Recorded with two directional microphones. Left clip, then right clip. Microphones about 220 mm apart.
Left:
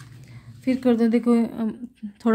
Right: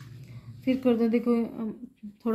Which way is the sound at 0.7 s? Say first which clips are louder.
Left 4 dB; 25° left (ahead or behind).